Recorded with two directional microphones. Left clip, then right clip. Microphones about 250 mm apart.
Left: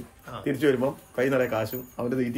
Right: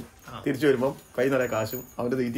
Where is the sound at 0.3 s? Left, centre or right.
Centre.